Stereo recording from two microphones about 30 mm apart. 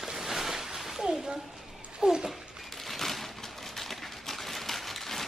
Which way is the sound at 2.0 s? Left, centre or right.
Right.